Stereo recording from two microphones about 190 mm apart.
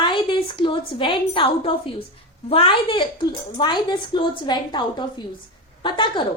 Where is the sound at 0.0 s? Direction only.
25° left (ahead or behind).